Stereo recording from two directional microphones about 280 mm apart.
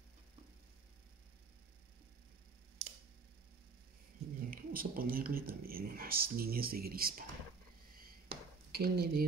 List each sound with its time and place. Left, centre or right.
4.4 s speech: right
8.7 s speech: right